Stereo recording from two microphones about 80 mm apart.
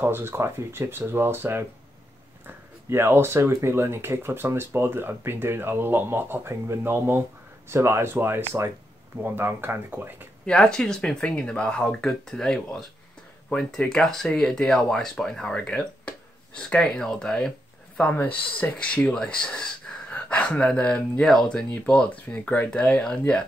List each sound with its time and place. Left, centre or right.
0.0 s speech: right
10.4 s speech: centre
18.0 s speech: left